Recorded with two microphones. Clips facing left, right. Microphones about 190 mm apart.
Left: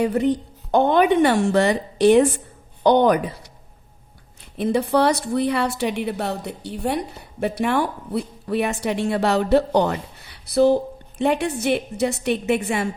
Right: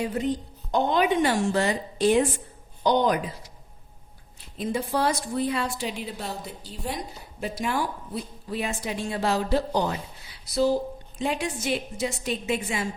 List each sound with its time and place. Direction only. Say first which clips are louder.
0.0 s a woman's voice: left 7 dB; 65° left (ahead or behind)
4.5 s a woman's voice: left 8 dB; 65° left (ahead or behind)